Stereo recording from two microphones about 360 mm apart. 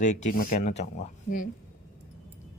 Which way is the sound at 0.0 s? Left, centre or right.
Centre.